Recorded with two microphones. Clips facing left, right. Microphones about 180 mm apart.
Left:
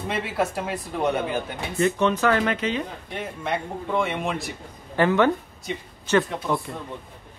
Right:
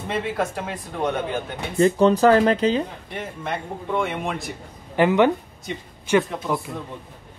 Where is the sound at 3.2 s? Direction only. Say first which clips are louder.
Left 1 dB; centre (ahead or behind).